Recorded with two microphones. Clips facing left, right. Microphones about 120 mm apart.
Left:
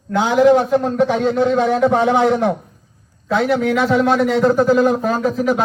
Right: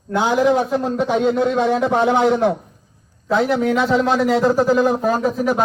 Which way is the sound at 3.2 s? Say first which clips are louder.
Even; 30° right (ahead or behind).